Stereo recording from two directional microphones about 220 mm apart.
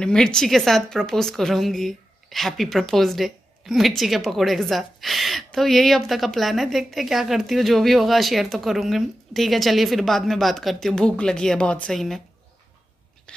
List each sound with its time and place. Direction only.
0.0 s a woman's voice: 5° left (ahead or behind)